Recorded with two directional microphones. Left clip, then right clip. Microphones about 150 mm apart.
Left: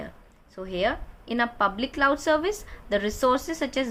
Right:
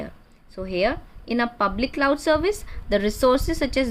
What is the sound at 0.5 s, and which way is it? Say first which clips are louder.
A woman's voice: right 3 dB; 25° right (ahead or behind).